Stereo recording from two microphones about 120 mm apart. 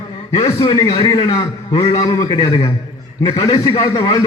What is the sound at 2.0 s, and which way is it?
Speech, 35° left (ahead or behind).